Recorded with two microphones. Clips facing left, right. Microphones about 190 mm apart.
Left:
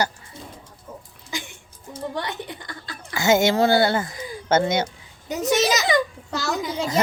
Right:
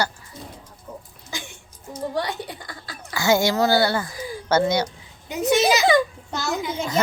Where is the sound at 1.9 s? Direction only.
25° left (ahead or behind).